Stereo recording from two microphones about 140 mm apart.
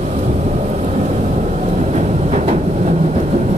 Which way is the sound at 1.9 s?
55° right (ahead or behind).